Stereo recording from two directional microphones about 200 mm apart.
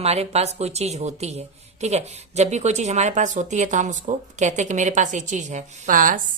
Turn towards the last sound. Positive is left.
turn(degrees=-45)  # may be behind; listen again after turning